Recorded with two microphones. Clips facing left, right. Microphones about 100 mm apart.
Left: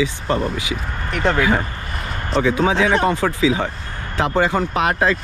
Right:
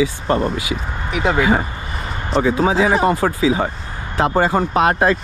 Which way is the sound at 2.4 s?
35° right (ahead or behind).